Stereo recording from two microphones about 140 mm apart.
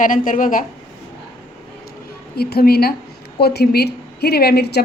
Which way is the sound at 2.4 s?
90° left.